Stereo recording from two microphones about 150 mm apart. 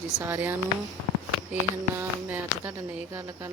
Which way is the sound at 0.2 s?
15° right (ahead or behind).